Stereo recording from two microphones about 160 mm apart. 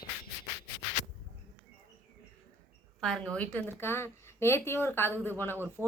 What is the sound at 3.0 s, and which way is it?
Speech, 5° left (ahead or behind).